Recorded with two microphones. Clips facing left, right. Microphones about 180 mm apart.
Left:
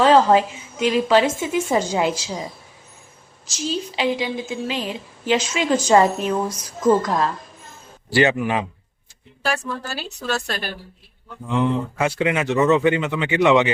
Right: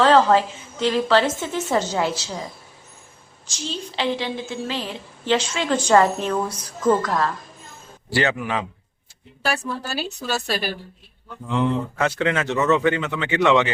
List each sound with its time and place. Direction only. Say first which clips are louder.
0.0 s a woman's voice: left 1 dB; 15° left (ahead or behind)
3.7 s a woman's voice: left 3 dB; 10° left (ahead or behind)
9.4 s a woman's voice: even; 10° right (ahead or behind)
11.4 s a woman's voice: left 1 dB; 10° left (ahead or behind)